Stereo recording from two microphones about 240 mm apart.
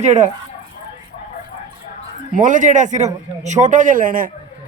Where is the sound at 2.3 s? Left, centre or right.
Right.